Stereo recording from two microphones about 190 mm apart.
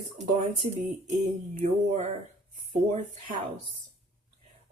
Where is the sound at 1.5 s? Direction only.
35° right (ahead or behind).